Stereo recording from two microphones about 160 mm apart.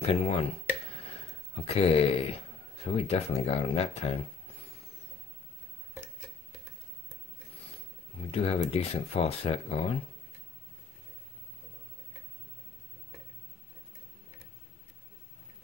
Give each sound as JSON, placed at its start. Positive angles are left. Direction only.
{"t": 0.0, "sound": "speech", "side_deg": 40}
{"t": 0.9, "sound": "a sound", "side_deg": 40}
{"t": 1.7, "sound": "speech", "side_deg": 40}
{"t": 8.3, "sound": "speech", "side_deg": 40}